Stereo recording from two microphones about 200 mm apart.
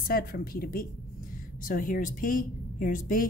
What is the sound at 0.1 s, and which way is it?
A woman's voice, 45° left (ahead or behind).